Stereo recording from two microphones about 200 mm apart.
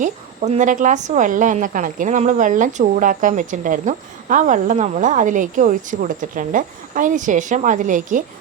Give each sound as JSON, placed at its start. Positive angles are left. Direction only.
{"t": 0.0, "sound": "a woman's voice", "side_deg": -35}